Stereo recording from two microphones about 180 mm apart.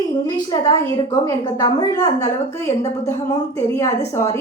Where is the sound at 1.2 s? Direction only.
20° left (ahead or behind).